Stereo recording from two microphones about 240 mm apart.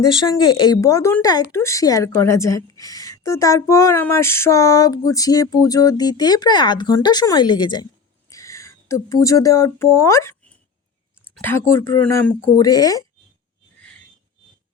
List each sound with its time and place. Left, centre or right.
0.0 s speech: centre
11.3 s speech: centre